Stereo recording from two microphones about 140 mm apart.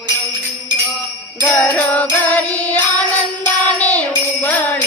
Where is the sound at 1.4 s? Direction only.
10° left (ahead or behind).